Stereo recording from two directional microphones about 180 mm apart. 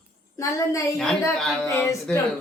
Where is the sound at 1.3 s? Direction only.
Centre (ahead or behind).